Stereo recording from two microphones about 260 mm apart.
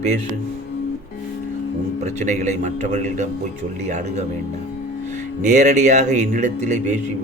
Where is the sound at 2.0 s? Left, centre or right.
Right.